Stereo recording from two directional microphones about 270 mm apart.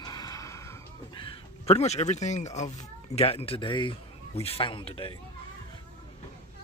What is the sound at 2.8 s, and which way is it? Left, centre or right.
Speech, left.